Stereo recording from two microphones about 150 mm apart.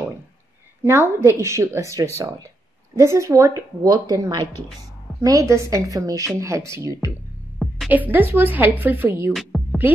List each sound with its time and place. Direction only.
0.8 s a woman's voice: 15° right (ahead or behind)
9.3 s music: centre (ahead or behind)